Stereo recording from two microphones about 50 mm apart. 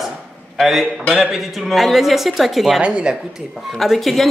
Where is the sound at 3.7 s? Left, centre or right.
Centre.